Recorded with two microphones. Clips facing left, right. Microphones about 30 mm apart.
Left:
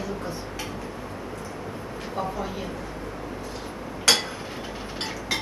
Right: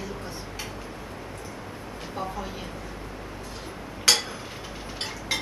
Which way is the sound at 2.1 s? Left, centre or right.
Centre.